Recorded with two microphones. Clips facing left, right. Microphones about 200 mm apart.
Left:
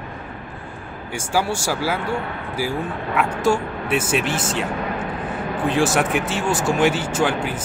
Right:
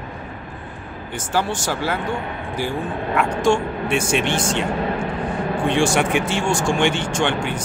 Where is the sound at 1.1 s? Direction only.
10° left (ahead or behind).